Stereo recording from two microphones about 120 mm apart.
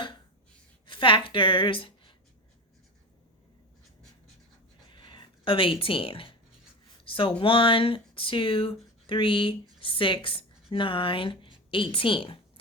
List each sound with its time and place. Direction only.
0.9 s a woman's voice: 45° left (ahead or behind)
4.9 s a sound: 40° left (ahead or behind)
7.1 s speech: 50° left (ahead or behind)